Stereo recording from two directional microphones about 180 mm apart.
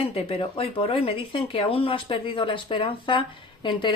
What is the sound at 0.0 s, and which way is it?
Speech, 30° left (ahead or behind).